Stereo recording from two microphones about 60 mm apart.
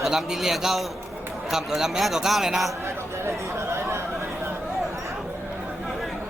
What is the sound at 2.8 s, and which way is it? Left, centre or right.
Chatter, right.